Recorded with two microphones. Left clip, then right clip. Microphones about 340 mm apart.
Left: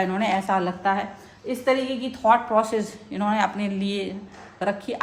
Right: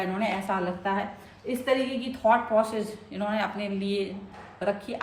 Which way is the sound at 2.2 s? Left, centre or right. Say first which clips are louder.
Left 3 dB; left.